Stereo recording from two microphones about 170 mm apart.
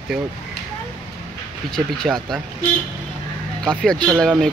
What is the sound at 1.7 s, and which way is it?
Speech, 5° left (ahead or behind).